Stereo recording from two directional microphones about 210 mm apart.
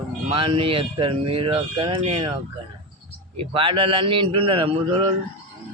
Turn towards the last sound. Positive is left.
turn(degrees=-25)  # may be behind; listen again after turning